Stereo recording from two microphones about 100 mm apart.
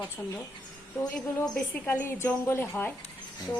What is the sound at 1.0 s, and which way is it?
Speech, 25° left (ahead or behind).